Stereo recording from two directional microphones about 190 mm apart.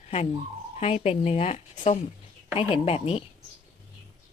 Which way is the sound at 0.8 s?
35° left (ahead or behind).